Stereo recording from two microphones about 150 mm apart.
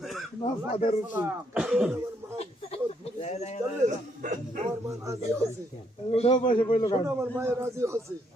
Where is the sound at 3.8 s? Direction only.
55° right (ahead or behind).